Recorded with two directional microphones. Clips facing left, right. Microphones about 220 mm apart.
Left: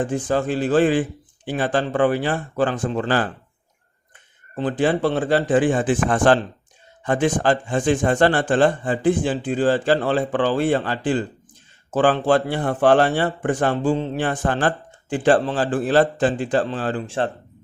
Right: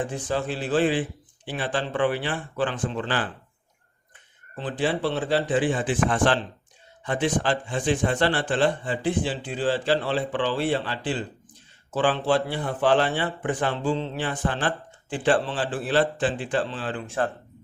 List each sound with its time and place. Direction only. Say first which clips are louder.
0.0 s a man's voice: left 6 dB; 45° left (ahead or behind)
4.5 s a man's voice: left 6 dB; 45° left (ahead or behind); by 17.2 s 30° left (ahead or behind)